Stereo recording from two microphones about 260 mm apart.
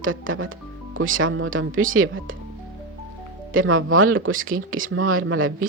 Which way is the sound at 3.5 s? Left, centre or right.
Right.